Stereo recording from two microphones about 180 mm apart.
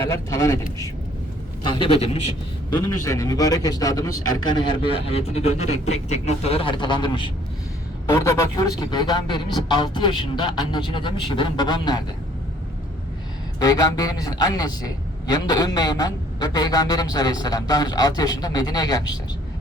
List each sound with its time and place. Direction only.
0.0 s a man's voice: 15° left (ahead or behind)
1.6 s a man's voice: 30° left (ahead or behind)
2.7 s a man's voice: 20° left (ahead or behind)
13.6 s a man's voice: 20° left (ahead or behind)